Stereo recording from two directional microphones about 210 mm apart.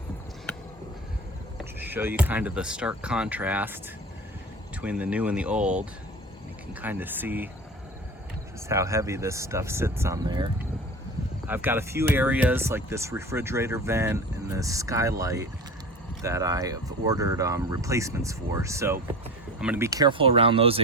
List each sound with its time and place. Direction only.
1.8 s speech: 10° right (ahead or behind)
4.8 s speech: 5° right (ahead or behind)
6.8 s speech: 10° right (ahead or behind)
8.7 s speech: 15° right (ahead or behind)
11.4 s speech: 10° right (ahead or behind); by 20.8 s 25° right (ahead or behind)